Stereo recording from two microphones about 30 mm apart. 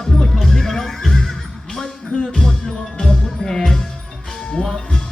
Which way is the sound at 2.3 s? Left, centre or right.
Centre.